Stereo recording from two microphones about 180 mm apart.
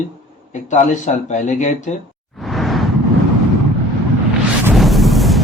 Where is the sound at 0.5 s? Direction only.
40° left (ahead or behind).